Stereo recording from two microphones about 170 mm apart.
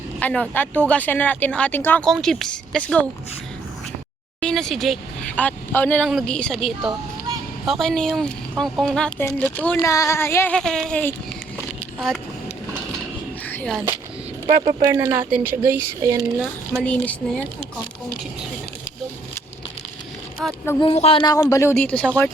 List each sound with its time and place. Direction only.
0.2 s speech: 10° left (ahead or behind)
4.4 s speech: 5° left (ahead or behind)
10.5 s speech: 5° left (ahead or behind)
13.5 s a sound: 5° left (ahead or behind)
14.4 s speech: 35° right (ahead or behind)
14.8 s a woman's voice: 20° right (ahead or behind)
16.8 s speech: 5° left (ahead or behind)
20.7 s speech: 15° left (ahead or behind)
20.9 s speech: 35° left (ahead or behind); by 22.3 s 5° left (ahead or behind)